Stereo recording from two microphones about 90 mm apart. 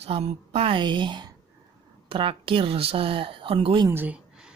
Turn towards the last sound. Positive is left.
turn(degrees=-25)  # may be behind; listen again after turning